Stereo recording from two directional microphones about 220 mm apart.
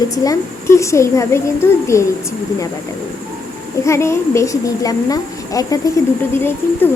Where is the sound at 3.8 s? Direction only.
10° left (ahead or behind).